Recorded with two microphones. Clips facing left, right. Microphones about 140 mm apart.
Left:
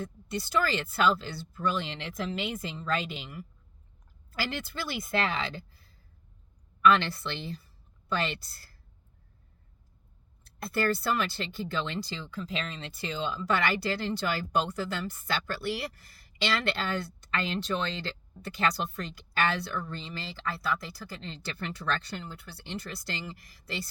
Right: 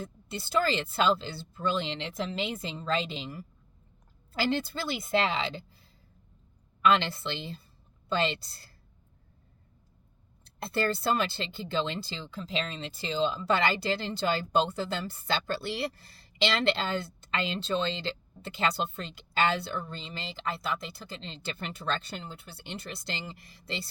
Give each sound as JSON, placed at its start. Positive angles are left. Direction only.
{"t": 0.0, "sound": "speech", "side_deg": -25}
{"t": 10.4, "sound": "speech", "side_deg": -25}